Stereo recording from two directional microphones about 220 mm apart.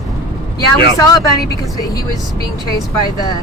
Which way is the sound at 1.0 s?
15° left (ahead or behind).